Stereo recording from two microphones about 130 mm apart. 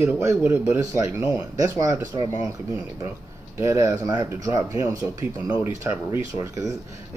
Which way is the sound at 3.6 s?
20° right (ahead or behind).